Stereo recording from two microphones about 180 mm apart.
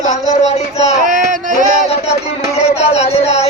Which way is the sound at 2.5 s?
35° left (ahead or behind).